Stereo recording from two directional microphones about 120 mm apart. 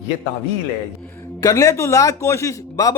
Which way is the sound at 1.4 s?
25° left (ahead or behind).